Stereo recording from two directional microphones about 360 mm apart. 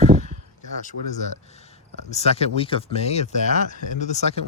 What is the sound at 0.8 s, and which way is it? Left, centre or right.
Speech, centre.